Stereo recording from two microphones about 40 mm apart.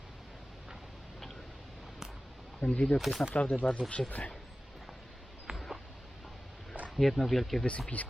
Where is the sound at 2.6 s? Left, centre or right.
Left.